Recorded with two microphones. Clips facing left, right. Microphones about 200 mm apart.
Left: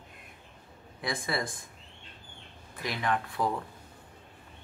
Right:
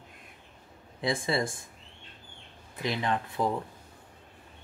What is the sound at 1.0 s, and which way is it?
Speech, 25° right (ahead or behind).